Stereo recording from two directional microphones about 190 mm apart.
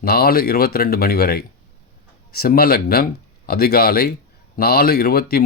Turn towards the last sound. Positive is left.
turn(degrees=55)  # may be behind; listen again after turning